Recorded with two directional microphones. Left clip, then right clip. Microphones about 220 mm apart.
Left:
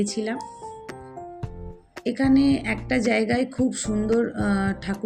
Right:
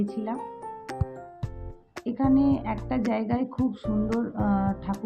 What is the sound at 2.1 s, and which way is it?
Speech, 15° left (ahead or behind).